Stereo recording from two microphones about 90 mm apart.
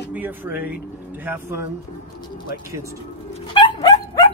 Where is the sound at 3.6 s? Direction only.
60° left (ahead or behind).